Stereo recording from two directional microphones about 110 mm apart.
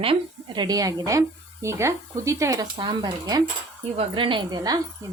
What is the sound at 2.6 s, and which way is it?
Speech, 45° right (ahead or behind).